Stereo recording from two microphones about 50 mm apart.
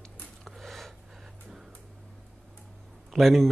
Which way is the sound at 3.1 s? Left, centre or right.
Centre.